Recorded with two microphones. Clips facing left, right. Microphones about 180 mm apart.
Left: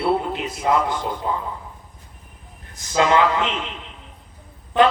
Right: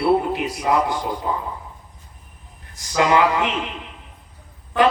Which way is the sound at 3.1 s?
15° right (ahead or behind).